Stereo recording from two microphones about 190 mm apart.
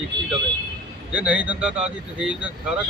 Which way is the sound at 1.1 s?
5° right (ahead or behind).